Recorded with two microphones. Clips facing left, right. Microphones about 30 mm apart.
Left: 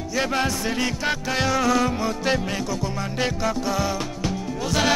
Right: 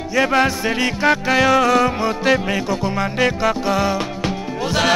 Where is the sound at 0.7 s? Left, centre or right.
Right.